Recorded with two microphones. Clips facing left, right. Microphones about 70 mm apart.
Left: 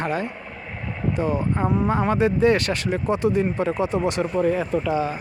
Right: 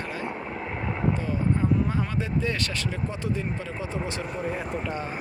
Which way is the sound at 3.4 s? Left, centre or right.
Left.